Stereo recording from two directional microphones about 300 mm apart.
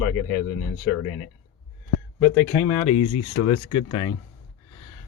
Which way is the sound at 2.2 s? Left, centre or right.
Centre.